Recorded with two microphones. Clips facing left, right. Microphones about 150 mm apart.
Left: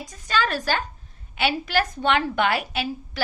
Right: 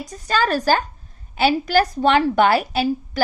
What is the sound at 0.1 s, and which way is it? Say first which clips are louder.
A woman's voice: right 5 dB; 40° right (ahead or behind).